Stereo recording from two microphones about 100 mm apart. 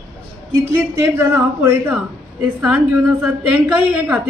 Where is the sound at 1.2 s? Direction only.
25° right (ahead or behind).